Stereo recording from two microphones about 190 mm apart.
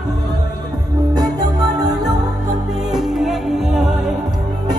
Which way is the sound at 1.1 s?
20° right (ahead or behind).